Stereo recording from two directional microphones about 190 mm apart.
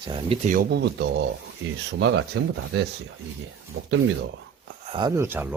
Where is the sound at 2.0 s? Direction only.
80° right.